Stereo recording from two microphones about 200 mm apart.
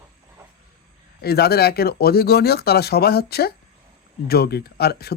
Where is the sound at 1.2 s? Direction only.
50° left (ahead or behind).